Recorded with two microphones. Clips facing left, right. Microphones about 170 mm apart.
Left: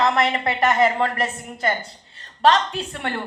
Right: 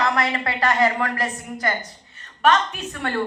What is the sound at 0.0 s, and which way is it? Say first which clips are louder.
A woman's voice: left 3 dB; 25° left (ahead or behind).